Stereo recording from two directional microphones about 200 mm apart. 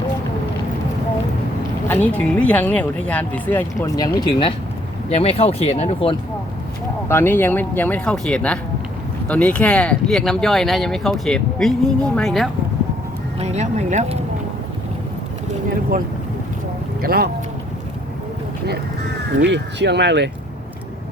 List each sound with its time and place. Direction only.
1.9 s speech: 10° left (ahead or behind); by 6.1 s 30° left (ahead or behind)
7.1 s speech: 10° left (ahead or behind)
13.4 s speech: 35° right (ahead or behind)
17.0 s speech: 50° right (ahead or behind)
19.4 s speech: 60° right (ahead or behind)